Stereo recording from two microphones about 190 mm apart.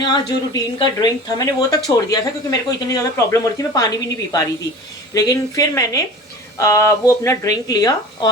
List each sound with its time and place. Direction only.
0.0 s a woman's voice: 25° left (ahead or behind)